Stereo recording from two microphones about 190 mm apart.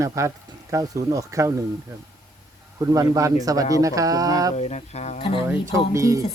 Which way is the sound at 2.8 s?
15° right (ahead or behind).